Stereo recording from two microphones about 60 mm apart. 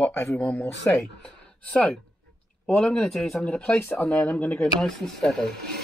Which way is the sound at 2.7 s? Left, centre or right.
Centre.